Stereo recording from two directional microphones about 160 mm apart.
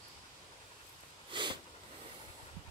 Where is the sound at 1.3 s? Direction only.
30° right (ahead or behind).